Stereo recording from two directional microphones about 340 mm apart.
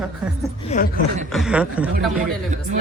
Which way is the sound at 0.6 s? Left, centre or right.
Left.